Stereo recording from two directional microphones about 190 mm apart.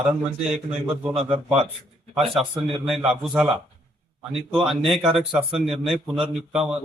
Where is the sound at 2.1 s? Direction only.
Centre (ahead or behind).